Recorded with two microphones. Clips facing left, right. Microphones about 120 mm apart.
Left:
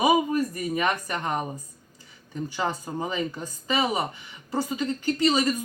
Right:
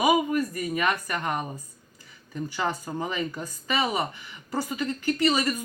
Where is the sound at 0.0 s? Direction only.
30° left (ahead or behind).